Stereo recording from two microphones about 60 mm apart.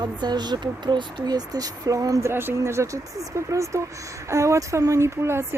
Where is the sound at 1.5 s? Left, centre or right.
Right.